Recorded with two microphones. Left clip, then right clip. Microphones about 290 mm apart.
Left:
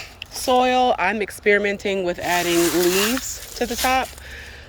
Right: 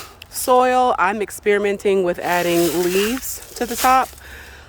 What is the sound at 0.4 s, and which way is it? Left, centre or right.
Speech, centre.